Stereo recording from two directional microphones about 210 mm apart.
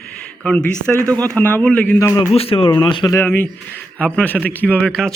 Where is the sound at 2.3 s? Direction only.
25° left (ahead or behind).